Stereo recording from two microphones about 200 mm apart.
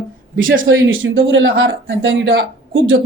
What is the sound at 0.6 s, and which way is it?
Speech, 70° right (ahead or behind).